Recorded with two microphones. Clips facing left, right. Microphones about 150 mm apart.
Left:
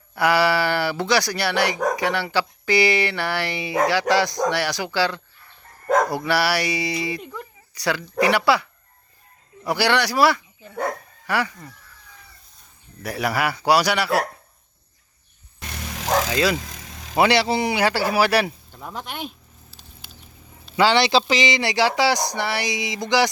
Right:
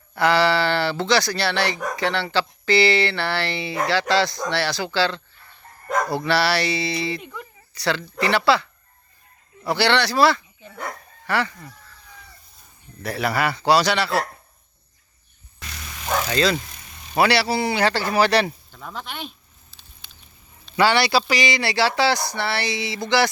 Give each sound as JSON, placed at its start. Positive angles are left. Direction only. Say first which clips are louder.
{"t": 0.1, "sound": "speech", "louder": "even", "side_deg": 10}
{"t": 9.6, "sound": "speech", "louder": "right 1 dB", "side_deg": 10}
{"t": 13.0, "sound": "speech", "louder": "right 1 dB", "side_deg": 10}
{"t": 16.0, "sound": "vehicle", "louder": "left 3 dB", "side_deg": 90}
{"t": 16.3, "sound": "speech", "louder": "right 4 dB", "side_deg": 10}
{"t": 16.6, "sound": "vehicle", "louder": "left 1 dB", "side_deg": 90}
{"t": 17.2, "sound": "speech", "louder": "left 1 dB", "side_deg": 20}
{"t": 19.7, "sound": "patter", "louder": "left 4 dB", "side_deg": 10}
{"t": 20.7, "sound": "speech", "louder": "left 1 dB", "side_deg": 15}